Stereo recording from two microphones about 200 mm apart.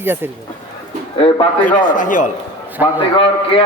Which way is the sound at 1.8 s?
40° left (ahead or behind).